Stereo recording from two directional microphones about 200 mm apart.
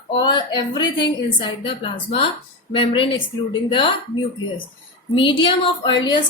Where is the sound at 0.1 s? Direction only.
25° left (ahead or behind).